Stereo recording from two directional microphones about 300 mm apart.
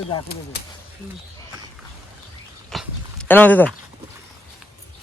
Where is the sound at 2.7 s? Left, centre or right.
Centre.